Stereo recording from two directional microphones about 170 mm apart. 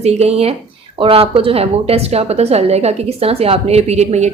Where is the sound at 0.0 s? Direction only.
40° right (ahead or behind).